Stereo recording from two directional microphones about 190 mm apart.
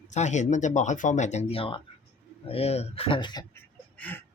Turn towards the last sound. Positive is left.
turn(degrees=10)  # may be behind; listen again after turning